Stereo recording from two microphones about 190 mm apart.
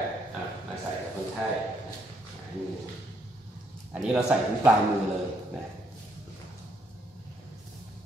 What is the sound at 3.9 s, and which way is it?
Speech, 5° right (ahead or behind).